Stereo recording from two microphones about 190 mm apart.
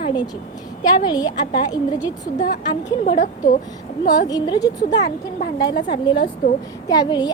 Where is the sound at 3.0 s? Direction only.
40° left (ahead or behind).